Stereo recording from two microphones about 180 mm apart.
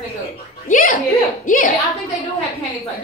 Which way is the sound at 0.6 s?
50° left (ahead or behind).